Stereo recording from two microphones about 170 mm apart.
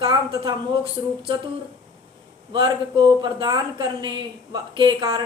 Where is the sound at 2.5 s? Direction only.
25° right (ahead or behind).